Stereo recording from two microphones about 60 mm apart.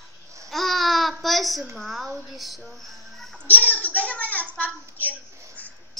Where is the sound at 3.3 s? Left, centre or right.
Left.